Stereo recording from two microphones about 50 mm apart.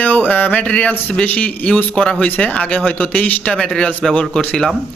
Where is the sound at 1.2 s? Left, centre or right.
Left.